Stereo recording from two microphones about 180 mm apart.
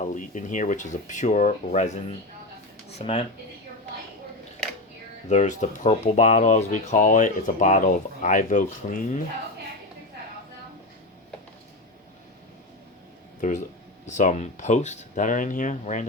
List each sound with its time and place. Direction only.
0.0 s speech: 45° left (ahead or behind)
2.9 s speech: 35° left (ahead or behind)
5.3 s speech: 40° left (ahead or behind)
14.1 s speech: 40° left (ahead or behind)